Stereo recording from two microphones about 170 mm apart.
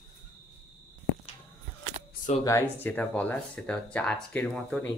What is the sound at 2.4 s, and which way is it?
Speech, 15° left (ahead or behind).